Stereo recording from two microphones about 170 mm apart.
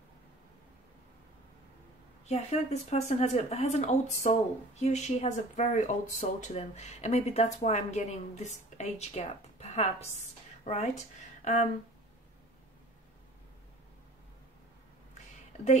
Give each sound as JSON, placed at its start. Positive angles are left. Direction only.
{"t": 2.2, "sound": "speech", "side_deg": 40}